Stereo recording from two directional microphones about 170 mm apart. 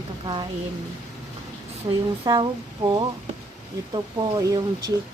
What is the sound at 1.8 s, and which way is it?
Speech, 30° right (ahead or behind).